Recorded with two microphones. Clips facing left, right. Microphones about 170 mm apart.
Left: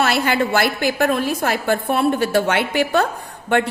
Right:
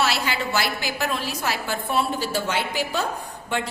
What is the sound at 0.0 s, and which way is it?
A woman's voice, 55° left (ahead or behind).